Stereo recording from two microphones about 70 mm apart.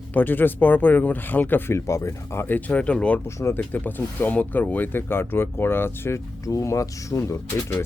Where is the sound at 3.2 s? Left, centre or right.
Left.